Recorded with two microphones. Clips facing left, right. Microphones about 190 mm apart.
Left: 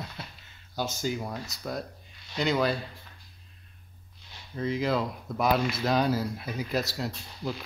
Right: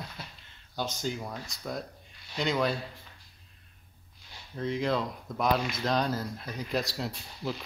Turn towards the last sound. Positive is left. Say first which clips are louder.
# left 1 dB
turn(degrees=0)  # may be behind; listen again after turning